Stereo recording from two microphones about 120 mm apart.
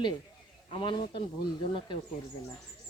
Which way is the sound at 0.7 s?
45° left (ahead or behind).